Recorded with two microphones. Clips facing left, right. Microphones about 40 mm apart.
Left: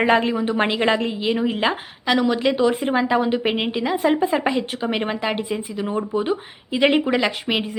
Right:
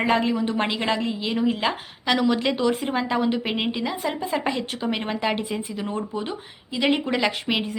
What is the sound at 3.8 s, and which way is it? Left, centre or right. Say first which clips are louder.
Speech: left 8 dB; left.